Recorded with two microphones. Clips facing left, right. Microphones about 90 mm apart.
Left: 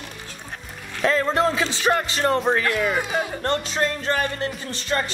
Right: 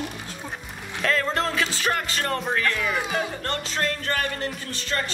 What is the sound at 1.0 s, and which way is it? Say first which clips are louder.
Music: left 4 dB; 20° left (ahead or behind).